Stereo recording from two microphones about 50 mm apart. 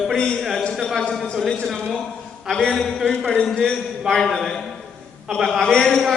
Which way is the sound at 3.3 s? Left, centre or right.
Centre.